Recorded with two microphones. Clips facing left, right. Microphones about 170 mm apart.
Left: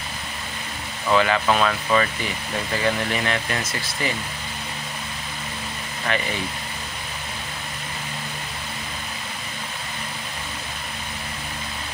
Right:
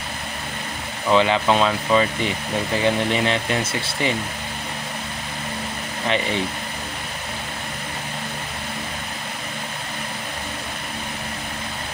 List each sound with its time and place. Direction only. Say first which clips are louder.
1.0 s speech: right 2 dB; 20° right (ahead or behind)